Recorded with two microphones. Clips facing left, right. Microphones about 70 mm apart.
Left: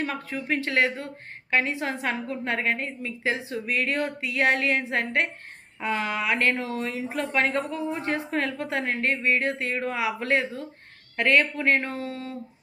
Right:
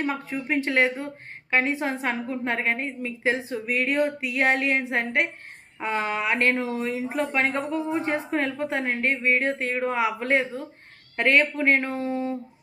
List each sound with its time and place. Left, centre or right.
0.0 s a woman's voice: centre